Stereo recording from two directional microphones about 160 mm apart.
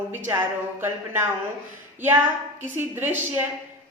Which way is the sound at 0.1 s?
15° right (ahead or behind).